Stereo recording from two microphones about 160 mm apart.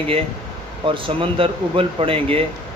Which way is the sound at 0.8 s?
35° right (ahead or behind).